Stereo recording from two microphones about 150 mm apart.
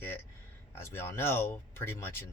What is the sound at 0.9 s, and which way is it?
Speech, 15° left (ahead or behind).